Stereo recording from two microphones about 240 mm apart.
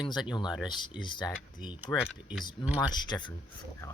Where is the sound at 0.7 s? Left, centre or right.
Centre.